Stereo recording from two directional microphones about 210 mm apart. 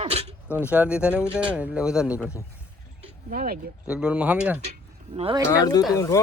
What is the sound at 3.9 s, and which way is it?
Speech, 5° right (ahead or behind).